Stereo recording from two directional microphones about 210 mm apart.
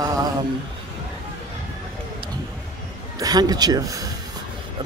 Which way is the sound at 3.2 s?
20° right (ahead or behind).